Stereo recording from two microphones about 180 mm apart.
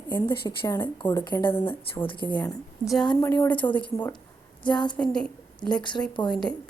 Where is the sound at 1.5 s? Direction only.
10° left (ahead or behind).